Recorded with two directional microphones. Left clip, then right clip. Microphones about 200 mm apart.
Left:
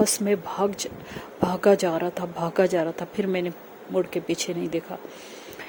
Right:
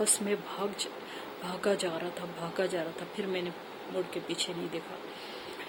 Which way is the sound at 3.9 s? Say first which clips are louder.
Left 10 dB; 45° left (ahead or behind).